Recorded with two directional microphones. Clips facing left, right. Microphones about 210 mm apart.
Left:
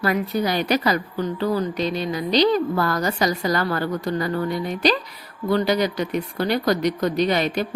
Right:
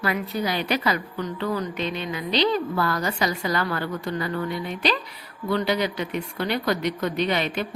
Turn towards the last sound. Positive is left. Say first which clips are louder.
# left 4 dB
turn(degrees=40)  # may be behind; listen again after turning